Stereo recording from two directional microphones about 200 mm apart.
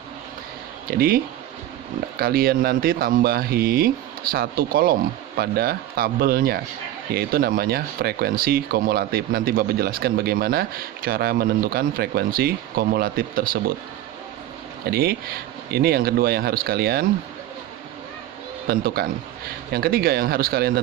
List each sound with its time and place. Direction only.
0.9 s speech: 50° right (ahead or behind)
14.8 s speech: 50° right (ahead or behind)
18.7 s speech: 50° right (ahead or behind)